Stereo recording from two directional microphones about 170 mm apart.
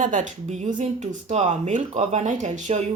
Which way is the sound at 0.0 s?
50° right (ahead or behind).